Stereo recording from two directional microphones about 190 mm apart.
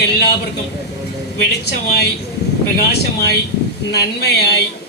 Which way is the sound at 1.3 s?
60° left (ahead or behind).